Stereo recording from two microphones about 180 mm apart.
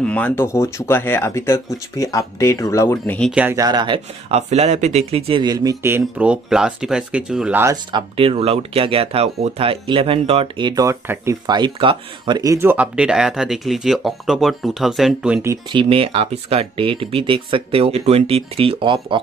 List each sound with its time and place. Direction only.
0.0 s speech: 10° left (ahead or behind)
3.3 s speech: 5° right (ahead or behind)
3.5 s speech: 25° right (ahead or behind)
7.7 s speech: 25° right (ahead or behind)
10.7 s speech: 20° right (ahead or behind)
15.5 s speech: 30° right (ahead or behind)